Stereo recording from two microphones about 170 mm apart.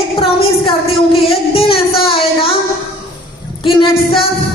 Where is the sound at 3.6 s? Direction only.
30° left (ahead or behind).